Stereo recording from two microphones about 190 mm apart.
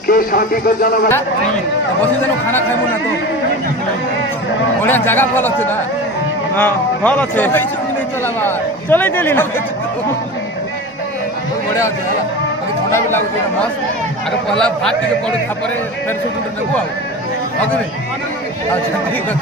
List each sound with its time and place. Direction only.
0.1 s speech: 50° left (ahead or behind)
4.8 s speech: 10° left (ahead or behind)
12.9 s a man's voice: 10° left (ahead or behind)